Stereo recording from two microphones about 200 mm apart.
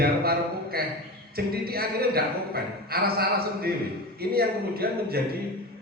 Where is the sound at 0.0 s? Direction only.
50° right (ahead or behind).